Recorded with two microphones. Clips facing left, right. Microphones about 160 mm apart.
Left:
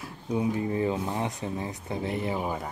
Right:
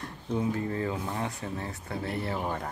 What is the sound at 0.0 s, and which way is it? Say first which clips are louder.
Speech: left 2 dB; 15° left (ahead or behind).